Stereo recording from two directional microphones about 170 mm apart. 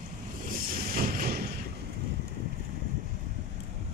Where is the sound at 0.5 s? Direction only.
55° right (ahead or behind).